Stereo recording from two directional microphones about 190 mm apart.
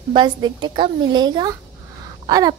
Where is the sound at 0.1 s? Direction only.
25° right (ahead or behind).